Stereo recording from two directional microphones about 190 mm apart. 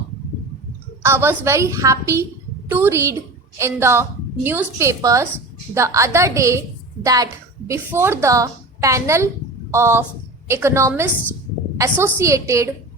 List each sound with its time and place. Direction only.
1.0 s a woman's voice: 10° right (ahead or behind)